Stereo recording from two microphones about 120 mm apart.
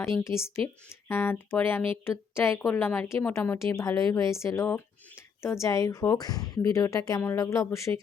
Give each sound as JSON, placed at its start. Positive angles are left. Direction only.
{"t": 0.0, "sound": "a woman's voice", "side_deg": 20}